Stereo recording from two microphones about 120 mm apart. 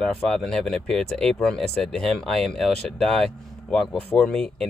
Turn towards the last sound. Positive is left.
turn(degrees=5)  # may be behind; listen again after turning